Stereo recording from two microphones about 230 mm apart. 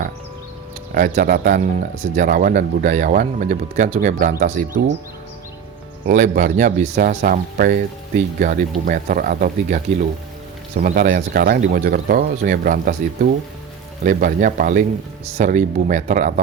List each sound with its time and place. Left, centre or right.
0.9 s speech: right
6.1 s speech: right
14.0 s speech: right